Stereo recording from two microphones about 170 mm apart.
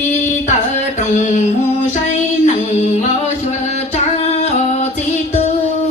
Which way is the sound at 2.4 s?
40° left (ahead or behind).